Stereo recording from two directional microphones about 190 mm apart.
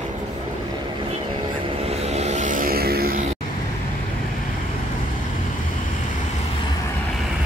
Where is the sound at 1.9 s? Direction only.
35° right (ahead or behind); by 3.2 s 55° right (ahead or behind).